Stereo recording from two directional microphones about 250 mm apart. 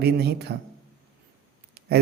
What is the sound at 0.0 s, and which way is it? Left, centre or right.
Speech, right.